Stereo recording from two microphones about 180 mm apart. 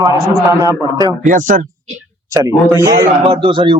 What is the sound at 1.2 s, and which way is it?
Speech, 45° right (ahead or behind).